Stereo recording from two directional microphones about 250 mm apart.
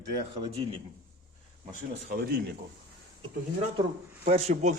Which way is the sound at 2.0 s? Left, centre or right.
Right.